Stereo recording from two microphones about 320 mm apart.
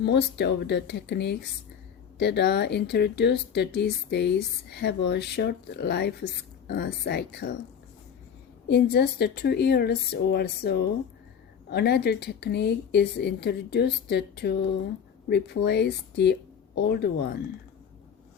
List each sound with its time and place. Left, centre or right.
0.0 s speech: left
8.6 s speech: left